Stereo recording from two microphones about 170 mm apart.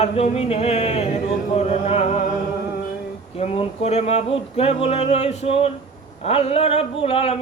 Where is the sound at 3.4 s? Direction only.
35° left (ahead or behind).